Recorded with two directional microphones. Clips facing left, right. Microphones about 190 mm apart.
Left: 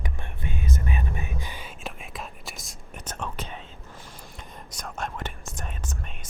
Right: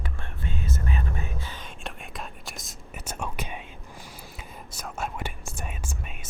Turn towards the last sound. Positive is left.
turn(degrees=-10)  # may be behind; listen again after turning